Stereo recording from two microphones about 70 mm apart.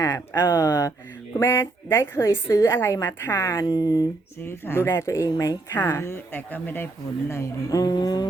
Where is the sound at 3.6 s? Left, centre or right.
Left.